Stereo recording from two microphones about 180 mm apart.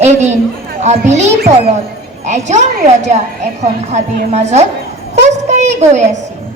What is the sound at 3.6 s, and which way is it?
A woman's voice, 40° right (ahead or behind).